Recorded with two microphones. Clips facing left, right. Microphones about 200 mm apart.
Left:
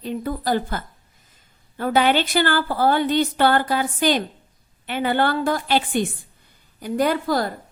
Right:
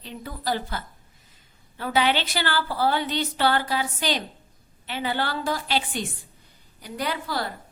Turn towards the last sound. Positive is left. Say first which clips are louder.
# left 8 dB
turn(degrees=45)  # may be behind; listen again after turning